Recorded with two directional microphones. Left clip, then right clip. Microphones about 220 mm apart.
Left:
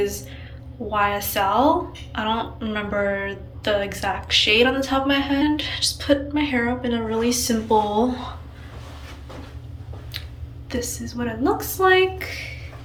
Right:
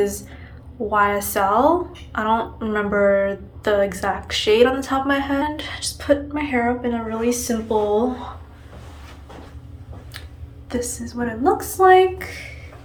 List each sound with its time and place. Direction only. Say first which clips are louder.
0.9 s a woman's voice: right 3 dB; 25° right (ahead or behind)
10.7 s a woman's voice: right 2 dB; 25° right (ahead or behind)